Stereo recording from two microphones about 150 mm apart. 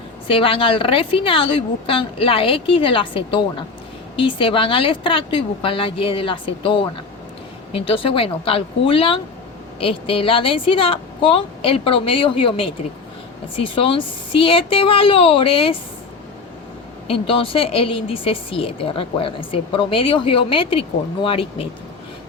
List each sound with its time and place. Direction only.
0.3 s a woman's voice: 35° left (ahead or behind)
17.1 s a woman's voice: 35° left (ahead or behind)